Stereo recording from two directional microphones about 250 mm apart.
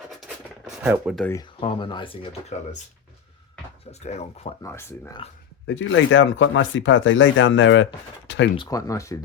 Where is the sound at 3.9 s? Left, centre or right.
Left.